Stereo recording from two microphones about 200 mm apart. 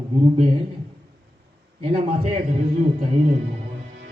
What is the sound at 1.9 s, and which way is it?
Speech, 30° right (ahead or behind).